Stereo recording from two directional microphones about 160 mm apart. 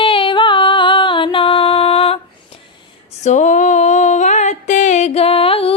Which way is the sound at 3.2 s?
50° left (ahead or behind).